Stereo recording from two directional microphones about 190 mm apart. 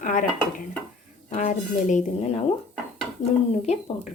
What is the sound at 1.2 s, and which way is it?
A woman's voice, 40° left (ahead or behind).